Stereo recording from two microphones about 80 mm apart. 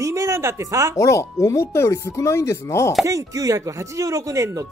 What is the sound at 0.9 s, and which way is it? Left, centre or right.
Speech, left.